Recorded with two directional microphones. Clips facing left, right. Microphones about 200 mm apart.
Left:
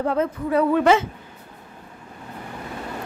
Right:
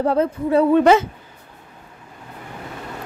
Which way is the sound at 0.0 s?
35° right (ahead or behind).